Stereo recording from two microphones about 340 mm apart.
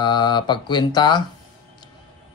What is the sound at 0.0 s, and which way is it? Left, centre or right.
Speech, centre.